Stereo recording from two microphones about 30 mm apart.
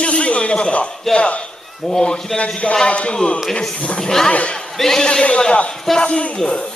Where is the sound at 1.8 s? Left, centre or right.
Left.